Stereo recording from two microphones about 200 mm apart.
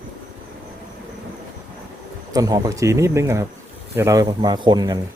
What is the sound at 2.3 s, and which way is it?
Speech, 15° right (ahead or behind).